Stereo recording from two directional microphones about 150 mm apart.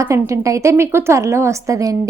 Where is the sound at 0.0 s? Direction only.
20° right (ahead or behind).